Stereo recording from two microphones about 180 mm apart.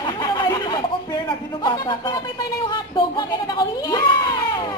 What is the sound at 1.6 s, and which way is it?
Speech, 25° left (ahead or behind).